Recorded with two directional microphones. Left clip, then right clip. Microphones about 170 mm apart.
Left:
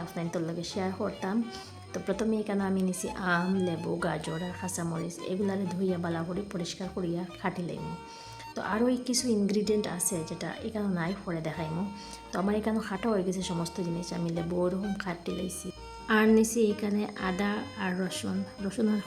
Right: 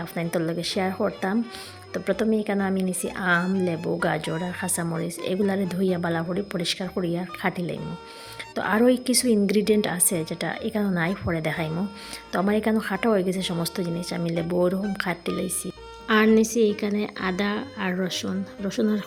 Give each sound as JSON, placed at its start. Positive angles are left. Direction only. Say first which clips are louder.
{"t": 0.2, "sound": "speech", "louder": "right 8 dB", "side_deg": -25}